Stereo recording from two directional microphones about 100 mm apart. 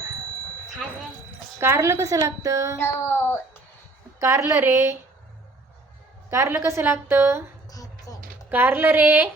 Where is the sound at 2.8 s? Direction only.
20° left (ahead or behind).